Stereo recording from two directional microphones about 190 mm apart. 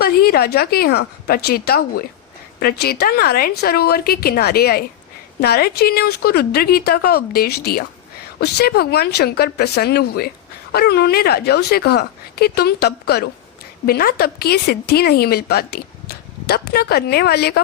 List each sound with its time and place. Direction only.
0.0 s a woman's voice: 55° left (ahead or behind)